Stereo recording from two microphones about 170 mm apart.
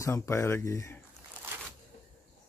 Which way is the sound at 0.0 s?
15° left (ahead or behind).